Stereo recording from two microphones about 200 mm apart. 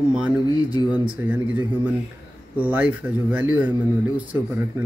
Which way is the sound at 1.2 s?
10° right (ahead or behind).